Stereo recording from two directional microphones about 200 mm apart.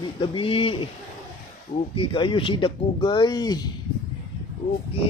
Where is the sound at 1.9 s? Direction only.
25° left (ahead or behind).